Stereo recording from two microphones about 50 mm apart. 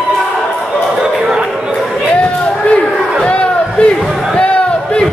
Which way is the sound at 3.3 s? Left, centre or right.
Left.